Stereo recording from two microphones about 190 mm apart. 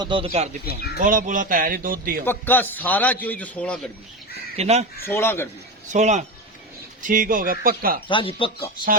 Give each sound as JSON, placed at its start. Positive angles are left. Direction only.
{"t": 0.0, "sound": "speech", "side_deg": -25}
{"t": 0.9, "sound": "speech", "side_deg": -45}
{"t": 2.2, "sound": "a man's voice", "side_deg": 10}
{"t": 4.5, "sound": "speech", "side_deg": -35}
{"t": 5.0, "sound": "a man's voice", "side_deg": 15}
{"t": 5.9, "sound": "speech", "side_deg": -40}
{"t": 8.0, "sound": "speech", "side_deg": 25}